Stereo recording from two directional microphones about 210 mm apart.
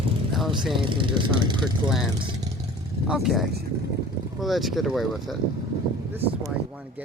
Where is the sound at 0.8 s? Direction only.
25° right (ahead or behind).